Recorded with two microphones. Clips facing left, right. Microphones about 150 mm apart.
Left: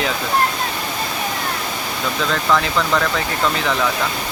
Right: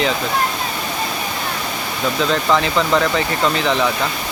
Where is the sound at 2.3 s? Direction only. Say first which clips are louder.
Even; 5° right (ahead or behind).